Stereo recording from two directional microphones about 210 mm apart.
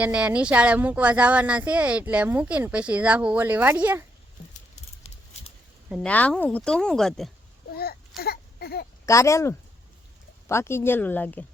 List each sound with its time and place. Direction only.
0.0 s speech: 5° right (ahead or behind)
5.9 s speech: 5° left (ahead or behind)
7.8 s a sound: 45° left (ahead or behind)
9.0 s speech: 15° left (ahead or behind)